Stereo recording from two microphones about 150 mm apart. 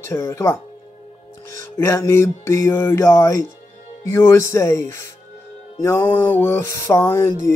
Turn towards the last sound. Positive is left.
turn(degrees=15)  # may be behind; listen again after turning